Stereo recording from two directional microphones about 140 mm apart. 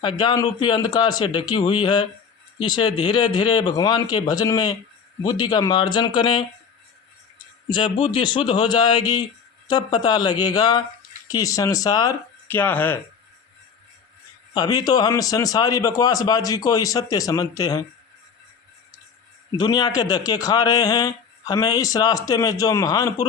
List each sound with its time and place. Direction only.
0.2 s speech: 30° left (ahead or behind)
7.7 s speech: 35° left (ahead or behind)
12.5 s speech: 15° left (ahead or behind)
14.5 s speech: 25° left (ahead or behind)
19.5 s speech: 30° left (ahead or behind)